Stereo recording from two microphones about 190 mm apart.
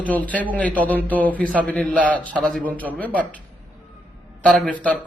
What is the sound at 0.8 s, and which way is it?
A man's voice, 10° left (ahead or behind).